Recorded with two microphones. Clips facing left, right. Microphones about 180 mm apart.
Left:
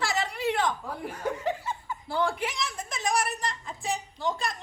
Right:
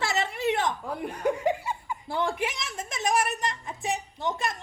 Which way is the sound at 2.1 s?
20° right (ahead or behind).